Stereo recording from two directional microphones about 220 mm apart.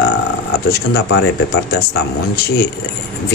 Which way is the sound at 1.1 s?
50° left (ahead or behind).